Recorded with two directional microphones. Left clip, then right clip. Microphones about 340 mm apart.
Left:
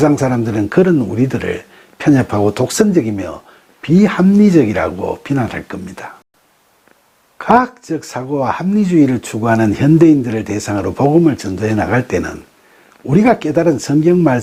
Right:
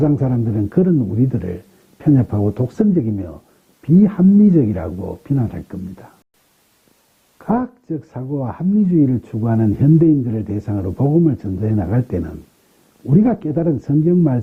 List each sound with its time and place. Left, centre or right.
0.0 s speech: centre
4.9 s speech: centre
5.2 s speech: centre
7.3 s speech: centre